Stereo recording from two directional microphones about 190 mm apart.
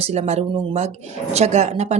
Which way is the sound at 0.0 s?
35° right (ahead or behind).